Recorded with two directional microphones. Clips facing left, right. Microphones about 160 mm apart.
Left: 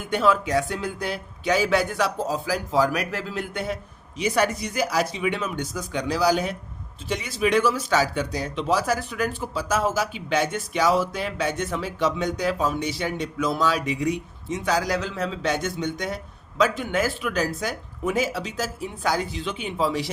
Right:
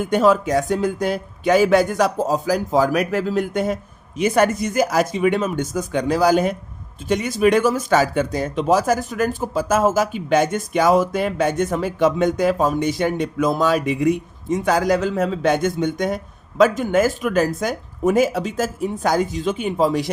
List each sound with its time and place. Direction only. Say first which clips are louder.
0.0 s speech: right 6 dB; 45° right (ahead or behind)